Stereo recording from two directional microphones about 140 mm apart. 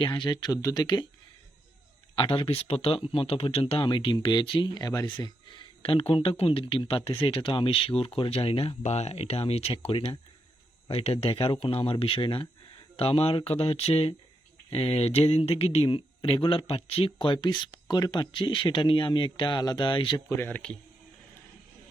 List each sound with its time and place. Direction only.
0.0 s speech: 35° left (ahead or behind)
2.1 s speech: 35° left (ahead or behind)
20.3 s speech: 15° left (ahead or behind)